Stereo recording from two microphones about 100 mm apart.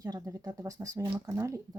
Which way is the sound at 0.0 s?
35° right (ahead or behind).